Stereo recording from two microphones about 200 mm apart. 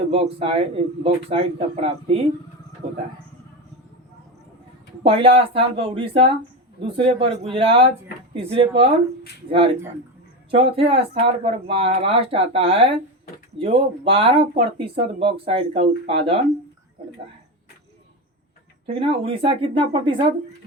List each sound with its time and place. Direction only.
0.1 s speech: 30° right (ahead or behind)
2.8 s a man's voice: 40° right (ahead or behind)
5.0 s speech: 25° right (ahead or behind)
10.5 s speech: 25° right (ahead or behind)
18.9 s speech: 25° right (ahead or behind)